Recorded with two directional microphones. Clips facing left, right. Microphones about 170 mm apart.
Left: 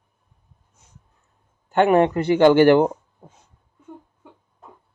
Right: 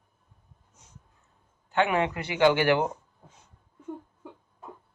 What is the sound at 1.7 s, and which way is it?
Speech, 50° left (ahead or behind).